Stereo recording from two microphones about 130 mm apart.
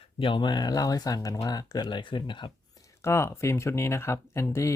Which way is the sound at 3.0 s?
20° left (ahead or behind).